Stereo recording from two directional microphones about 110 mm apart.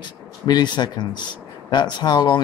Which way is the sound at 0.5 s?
40° left (ahead or behind).